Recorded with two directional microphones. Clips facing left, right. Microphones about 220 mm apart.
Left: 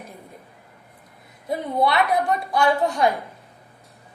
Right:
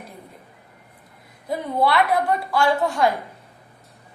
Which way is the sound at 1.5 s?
20° left (ahead or behind).